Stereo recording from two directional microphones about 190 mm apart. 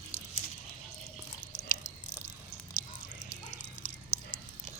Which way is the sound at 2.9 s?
45° left (ahead or behind).